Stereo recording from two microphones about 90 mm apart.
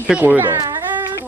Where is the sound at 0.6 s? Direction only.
40° right (ahead or behind).